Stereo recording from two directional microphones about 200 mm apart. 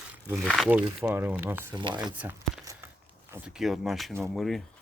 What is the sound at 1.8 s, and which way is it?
Speech, 25° right (ahead or behind).